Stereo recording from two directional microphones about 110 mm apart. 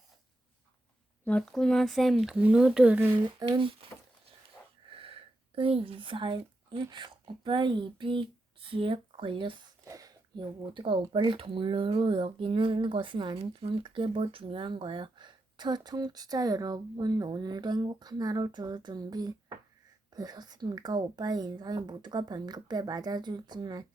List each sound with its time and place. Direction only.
1.2 s speech: 10° left (ahead or behind)
2.2 s speech: 10° right (ahead or behind)
3.4 s speech: 35° right (ahead or behind)
4.9 s speech: 55° right (ahead or behind)
9.8 s speech: 30° right (ahead or behind); by 13.4 s 50° right (ahead or behind)
13.4 s speech: 60° right (ahead or behind); by 23.8 s 40° right (ahead or behind)